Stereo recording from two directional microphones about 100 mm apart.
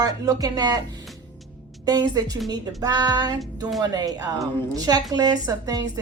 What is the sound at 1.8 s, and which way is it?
A woman's voice, 40° right (ahead or behind).